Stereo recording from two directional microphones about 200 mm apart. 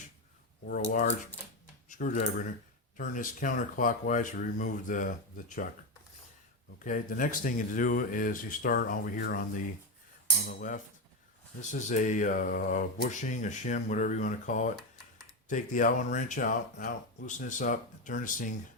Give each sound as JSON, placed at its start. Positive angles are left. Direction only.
{"t": 1.9, "sound": "speech", "side_deg": 40}
{"t": 6.8, "sound": "speech", "side_deg": 40}